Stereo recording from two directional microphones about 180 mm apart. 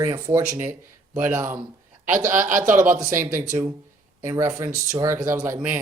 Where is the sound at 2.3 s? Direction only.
45° right (ahead or behind).